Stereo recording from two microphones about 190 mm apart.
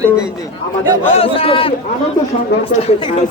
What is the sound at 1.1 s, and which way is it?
Speech, 30° left (ahead or behind).